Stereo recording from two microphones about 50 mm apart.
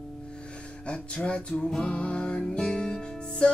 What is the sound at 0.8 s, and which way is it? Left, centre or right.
Music, left.